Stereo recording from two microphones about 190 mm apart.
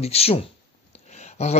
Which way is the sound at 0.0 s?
30° left (ahead or behind).